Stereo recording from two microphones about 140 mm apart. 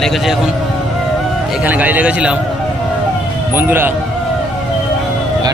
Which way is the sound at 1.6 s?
10° right (ahead or behind).